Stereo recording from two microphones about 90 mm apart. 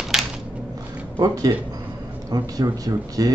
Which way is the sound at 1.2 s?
45° right (ahead or behind).